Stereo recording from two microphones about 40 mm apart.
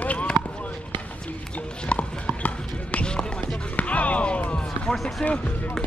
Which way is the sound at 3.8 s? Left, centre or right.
Left.